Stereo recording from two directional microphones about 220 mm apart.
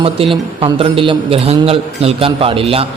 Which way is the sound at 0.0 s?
25° right (ahead or behind).